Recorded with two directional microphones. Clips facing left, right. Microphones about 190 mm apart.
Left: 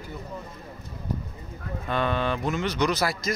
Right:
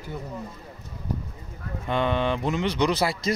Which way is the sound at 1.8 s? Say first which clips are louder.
Right 2 dB; 20° right (ahead or behind).